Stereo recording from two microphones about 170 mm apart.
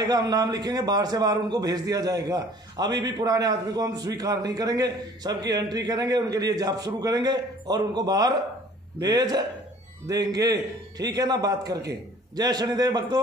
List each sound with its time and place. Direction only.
0.0 s a man's voice: 25° right (ahead or behind)